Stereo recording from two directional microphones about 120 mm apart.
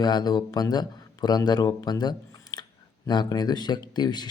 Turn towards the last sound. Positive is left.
turn(degrees=35)  # may be behind; listen again after turning